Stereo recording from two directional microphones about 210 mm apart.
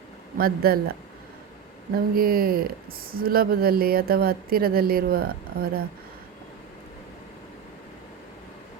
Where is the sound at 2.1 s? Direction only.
45° right (ahead or behind).